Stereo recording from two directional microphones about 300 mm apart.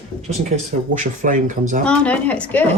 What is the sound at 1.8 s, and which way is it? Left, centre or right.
Speech, centre.